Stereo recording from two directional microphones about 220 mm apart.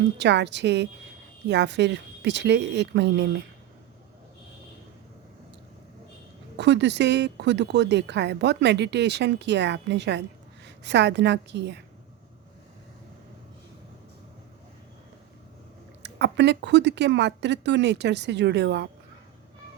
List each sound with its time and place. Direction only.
0.2 s speech: 50° right (ahead or behind)
6.6 s speech: 50° right (ahead or behind)
16.0 s speech: 50° right (ahead or behind)